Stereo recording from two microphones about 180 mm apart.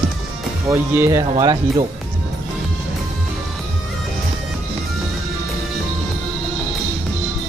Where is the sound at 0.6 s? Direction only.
15° right (ahead or behind).